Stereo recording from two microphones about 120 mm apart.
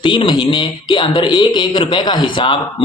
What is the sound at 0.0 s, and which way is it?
Speech, 40° left (ahead or behind).